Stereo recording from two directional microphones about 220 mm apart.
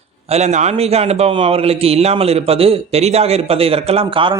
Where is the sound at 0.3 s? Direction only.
30° right (ahead or behind).